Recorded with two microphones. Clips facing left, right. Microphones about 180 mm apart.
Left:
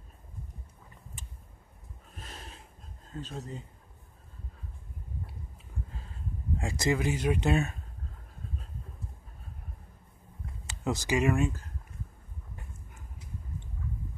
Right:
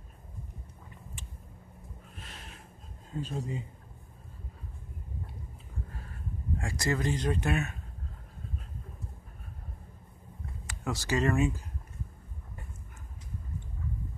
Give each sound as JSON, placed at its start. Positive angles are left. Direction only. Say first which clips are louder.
{"t": 2.1, "sound": "snort", "louder": "left 4 dB", "side_deg": 40}
{"t": 3.1, "sound": "speech", "louder": "right 4 dB", "side_deg": -10}
{"t": 6.6, "sound": "speech", "louder": "left 3 dB", "side_deg": 20}
{"t": 7.0, "sound": "speech", "louder": "left 1 dB", "side_deg": 10}
{"t": 10.7, "sound": "speech", "louder": "left 2 dB", "side_deg": 20}
{"t": 11.3, "sound": "speech", "louder": "right 1 dB", "side_deg": -5}